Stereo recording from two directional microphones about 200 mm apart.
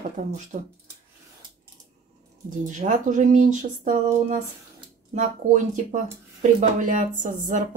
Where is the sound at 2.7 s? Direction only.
40° right (ahead or behind).